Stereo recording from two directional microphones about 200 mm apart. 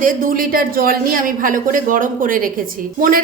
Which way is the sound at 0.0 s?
45° right (ahead or behind).